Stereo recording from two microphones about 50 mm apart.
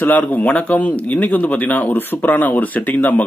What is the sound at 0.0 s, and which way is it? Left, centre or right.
Speech, left.